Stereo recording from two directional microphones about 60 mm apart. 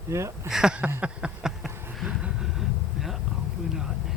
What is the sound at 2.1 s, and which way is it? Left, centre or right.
Vehicle, centre.